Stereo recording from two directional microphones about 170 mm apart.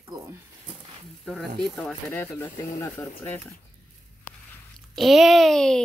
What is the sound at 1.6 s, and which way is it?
A child's voice, centre (ahead or behind).